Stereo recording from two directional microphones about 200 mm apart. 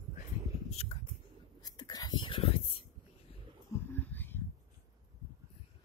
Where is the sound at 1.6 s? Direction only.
20° left (ahead or behind).